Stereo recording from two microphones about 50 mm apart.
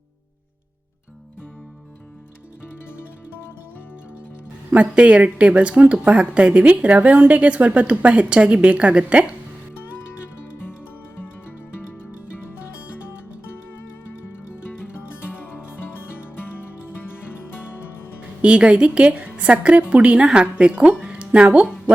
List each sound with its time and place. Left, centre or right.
4.7 s a woman's voice: right
10.4 s music: left
14.8 s music: left
18.4 s a woman's voice: right